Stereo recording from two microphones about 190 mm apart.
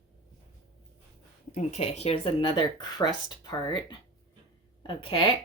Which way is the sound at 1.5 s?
35° left (ahead or behind).